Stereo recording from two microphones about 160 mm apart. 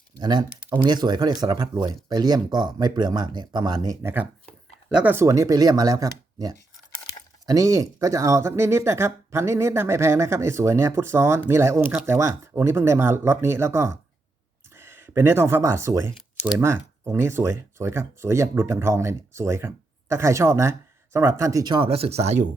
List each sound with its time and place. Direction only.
0.2 s speech: 25° right (ahead or behind); by 22.4 s 40° right (ahead or behind)